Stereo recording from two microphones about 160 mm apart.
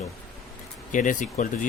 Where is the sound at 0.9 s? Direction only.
55° left (ahead or behind).